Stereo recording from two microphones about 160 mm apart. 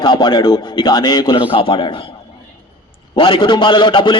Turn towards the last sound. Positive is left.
turn(degrees=30)  # may be behind; listen again after turning